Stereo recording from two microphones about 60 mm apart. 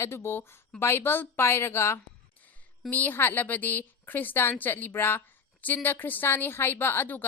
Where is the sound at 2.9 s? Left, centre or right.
Left.